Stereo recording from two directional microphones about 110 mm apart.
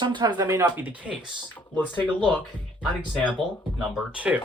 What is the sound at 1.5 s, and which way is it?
Speech, 15° left (ahead or behind).